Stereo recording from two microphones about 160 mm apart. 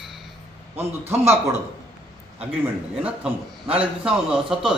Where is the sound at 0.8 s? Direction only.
15° right (ahead or behind).